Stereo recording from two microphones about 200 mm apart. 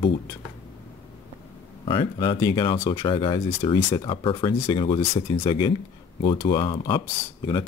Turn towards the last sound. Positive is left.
turn(degrees=20)  # may be behind; listen again after turning